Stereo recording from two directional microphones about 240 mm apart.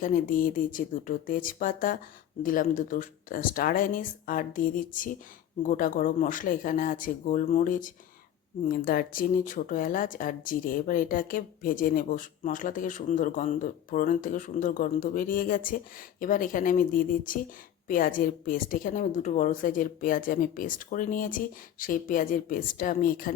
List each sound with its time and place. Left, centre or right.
0.0 s speech: left